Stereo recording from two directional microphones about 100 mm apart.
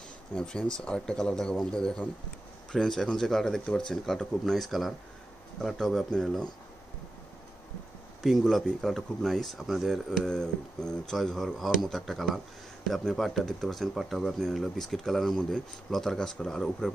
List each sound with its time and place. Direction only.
0.4 s speech: 5° left (ahead or behind)
8.2 s speech: centre (ahead or behind)